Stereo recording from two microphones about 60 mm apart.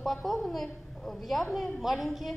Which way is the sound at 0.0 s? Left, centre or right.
Centre.